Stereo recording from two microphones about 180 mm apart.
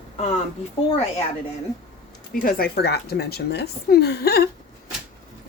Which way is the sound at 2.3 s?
55° left (ahead or behind).